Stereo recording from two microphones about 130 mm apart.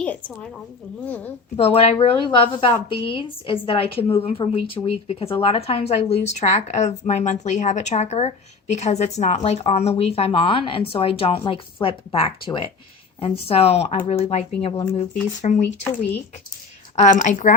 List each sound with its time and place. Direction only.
1.0 s a woman's voice: 15° left (ahead or behind)
1.5 s a woman's voice: 55° left (ahead or behind)
15.4 s speech: 65° left (ahead or behind)
17.0 s a woman's voice: 75° left (ahead or behind)